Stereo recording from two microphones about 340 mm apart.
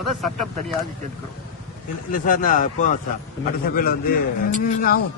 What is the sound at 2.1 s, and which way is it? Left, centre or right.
Speech, left.